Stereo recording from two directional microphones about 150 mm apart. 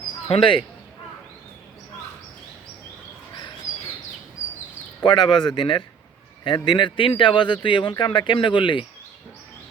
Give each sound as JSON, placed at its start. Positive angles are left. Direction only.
{"t": 0.3, "sound": "speech", "side_deg": 35}
{"t": 3.3, "sound": "bird", "side_deg": 35}
{"t": 5.0, "sound": "speech", "side_deg": 30}